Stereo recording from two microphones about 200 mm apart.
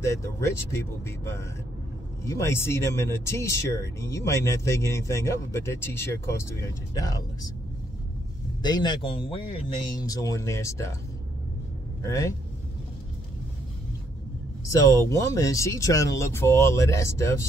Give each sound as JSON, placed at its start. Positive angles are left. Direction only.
{"t": 0.0, "sound": "speech", "side_deg": 15}
{"t": 8.6, "sound": "speech", "side_deg": 20}
{"t": 12.0, "sound": "speech", "side_deg": 15}
{"t": 14.7, "sound": "speech", "side_deg": 15}